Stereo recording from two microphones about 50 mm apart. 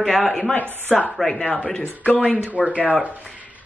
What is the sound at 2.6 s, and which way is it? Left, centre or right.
Speech, right.